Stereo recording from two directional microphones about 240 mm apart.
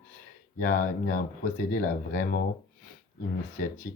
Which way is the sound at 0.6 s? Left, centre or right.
Left.